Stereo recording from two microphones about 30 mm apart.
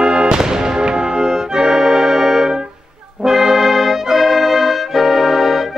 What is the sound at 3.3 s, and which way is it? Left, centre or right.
Brass instrument, centre.